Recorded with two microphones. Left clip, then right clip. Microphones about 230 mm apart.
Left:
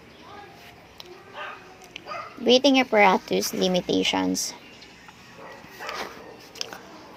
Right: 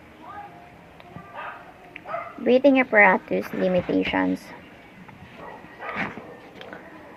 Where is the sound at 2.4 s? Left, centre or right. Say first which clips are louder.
Right 1 dB; left.